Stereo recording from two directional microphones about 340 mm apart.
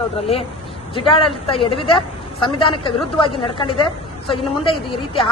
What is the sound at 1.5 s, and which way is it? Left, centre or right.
A woman's voice, centre.